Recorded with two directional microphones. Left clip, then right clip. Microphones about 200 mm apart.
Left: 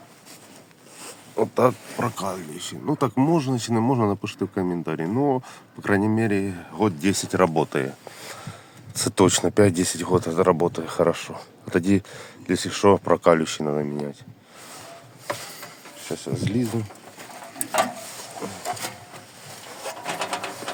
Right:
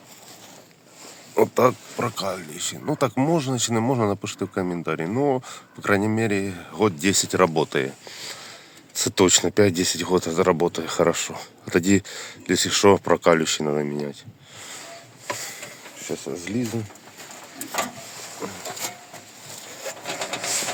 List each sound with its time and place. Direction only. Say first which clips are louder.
1.5 s speech: right 1 dB; 5° left (ahead or behind)
16.1 s speech: left 2 dB; 10° left (ahead or behind)
18.4 s printer: right 1 dB; 5° left (ahead or behind)
19.8 s a sound: left 1 dB; 50° left (ahead or behind)